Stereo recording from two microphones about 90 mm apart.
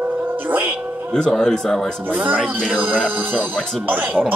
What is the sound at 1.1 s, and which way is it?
Speech, 5° left (ahead or behind).